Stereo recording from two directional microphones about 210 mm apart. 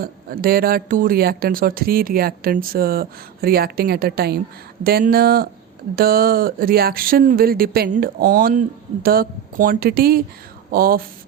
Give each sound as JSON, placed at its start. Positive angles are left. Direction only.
{"t": 0.0, "sound": "speech", "side_deg": -45}